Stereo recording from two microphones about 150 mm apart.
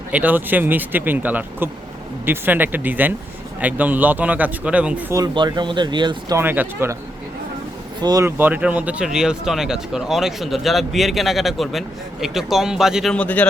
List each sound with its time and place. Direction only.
0.1 s speech: 10° right (ahead or behind)
5.1 s speech: 30° right (ahead or behind)
6.4 s speech: 15° right (ahead or behind)
8.0 s speech: 25° right (ahead or behind)
8.4 s speech: 10° right (ahead or behind); by 13.4 s 10° left (ahead or behind)